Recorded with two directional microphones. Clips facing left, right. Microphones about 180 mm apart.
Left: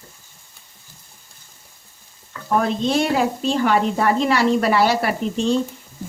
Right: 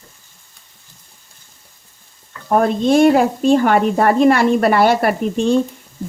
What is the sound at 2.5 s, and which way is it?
Speech, 50° right (ahead or behind).